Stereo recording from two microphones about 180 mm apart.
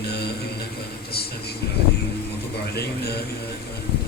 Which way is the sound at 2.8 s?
60° left (ahead or behind).